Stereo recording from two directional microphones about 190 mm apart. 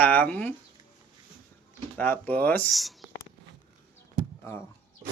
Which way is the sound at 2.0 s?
10° left (ahead or behind).